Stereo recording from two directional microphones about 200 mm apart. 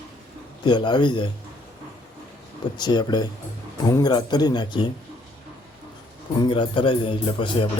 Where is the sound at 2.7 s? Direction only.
20° left (ahead or behind).